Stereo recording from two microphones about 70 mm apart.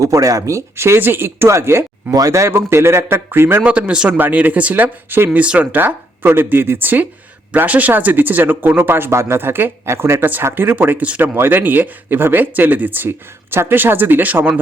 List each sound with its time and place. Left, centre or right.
0.0 s speech: right
3.6 s speech: centre